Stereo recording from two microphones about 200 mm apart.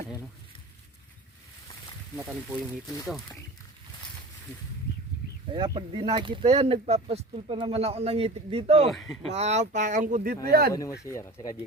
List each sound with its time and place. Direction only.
2.1 s speech: 5° right (ahead or behind)
5.5 s speech: 20° right (ahead or behind)
8.9 s speech: centre (ahead or behind)
9.2 s speech: 35° right (ahead or behind)
10.7 s speech: 15° left (ahead or behind)